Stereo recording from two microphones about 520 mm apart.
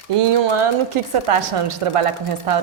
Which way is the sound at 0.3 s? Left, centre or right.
Right.